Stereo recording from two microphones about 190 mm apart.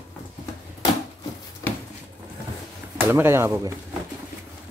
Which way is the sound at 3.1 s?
15° right (ahead or behind).